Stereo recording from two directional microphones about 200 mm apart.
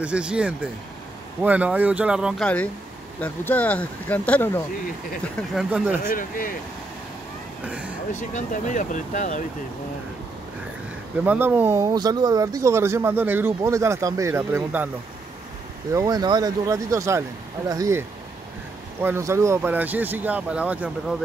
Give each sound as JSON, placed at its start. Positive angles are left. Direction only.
{"t": 0.0, "sound": "speech", "side_deg": -5}
{"t": 5.5, "sound": "speech", "side_deg": -5}
{"t": 6.0, "sound": "speech", "side_deg": 45}
{"t": 7.6, "sound": "speech", "side_deg": -5}
{"t": 8.1, "sound": "speech", "side_deg": 35}
{"t": 11.2, "sound": "speech", "side_deg": -10}
{"t": 15.9, "sound": "speech", "side_deg": -15}